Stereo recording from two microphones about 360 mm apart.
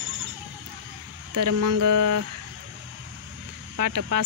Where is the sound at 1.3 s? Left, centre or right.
Right.